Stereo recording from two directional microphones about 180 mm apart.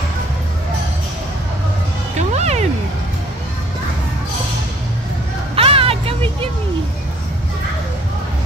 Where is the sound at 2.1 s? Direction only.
40° right (ahead or behind).